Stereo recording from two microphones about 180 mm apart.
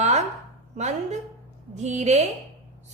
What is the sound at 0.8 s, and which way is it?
A woman's voice, 40° right (ahead or behind).